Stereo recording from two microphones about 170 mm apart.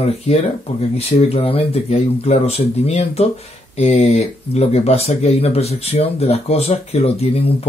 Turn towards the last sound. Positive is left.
turn(degrees=35)  # may be behind; listen again after turning